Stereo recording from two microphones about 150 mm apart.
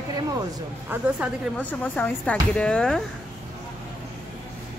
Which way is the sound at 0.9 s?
10° right (ahead or behind).